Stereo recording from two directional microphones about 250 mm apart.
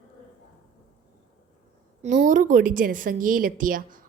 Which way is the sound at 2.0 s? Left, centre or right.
Right.